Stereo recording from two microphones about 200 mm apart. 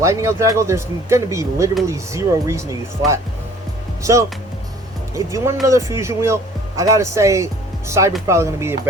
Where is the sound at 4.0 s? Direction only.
15° right (ahead or behind).